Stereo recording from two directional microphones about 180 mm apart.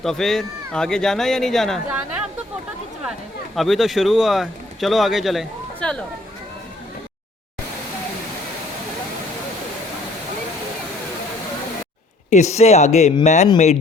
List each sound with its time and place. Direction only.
0.0 s speech: centre (ahead or behind)
3.5 s speech: centre (ahead or behind)
12.3 s speech: 40° left (ahead or behind)